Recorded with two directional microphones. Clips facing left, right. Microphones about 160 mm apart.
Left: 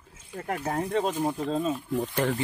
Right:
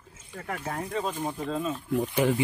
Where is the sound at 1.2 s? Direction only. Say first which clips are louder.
Left 3 dB; 30° left (ahead or behind).